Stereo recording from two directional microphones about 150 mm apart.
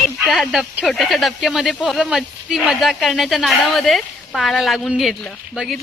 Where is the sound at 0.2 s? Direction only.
Centre (ahead or behind).